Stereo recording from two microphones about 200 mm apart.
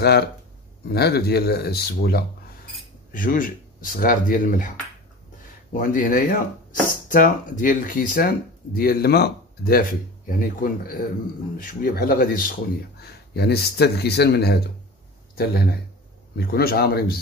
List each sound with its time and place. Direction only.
0.0 s speech: 55° left (ahead or behind)